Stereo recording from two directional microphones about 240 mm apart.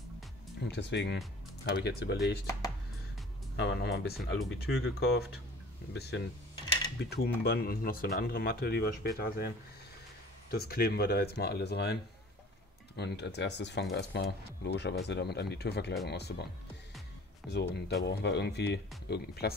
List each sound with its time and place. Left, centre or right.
0.7 s speech: left
3.5 s speech: left
10.5 s speech: left
17.5 s speech: left